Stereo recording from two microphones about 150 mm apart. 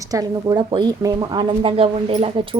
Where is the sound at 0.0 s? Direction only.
25° right (ahead or behind).